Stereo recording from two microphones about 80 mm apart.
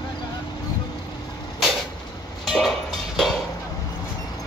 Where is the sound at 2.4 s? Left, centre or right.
Centre.